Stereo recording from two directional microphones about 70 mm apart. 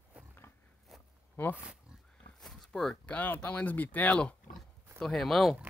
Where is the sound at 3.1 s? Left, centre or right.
Left.